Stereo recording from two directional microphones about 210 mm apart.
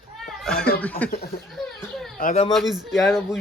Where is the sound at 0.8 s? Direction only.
5° left (ahead or behind).